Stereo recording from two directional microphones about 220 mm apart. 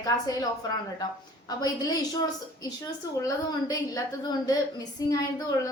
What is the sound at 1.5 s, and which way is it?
Speech, 15° left (ahead or behind).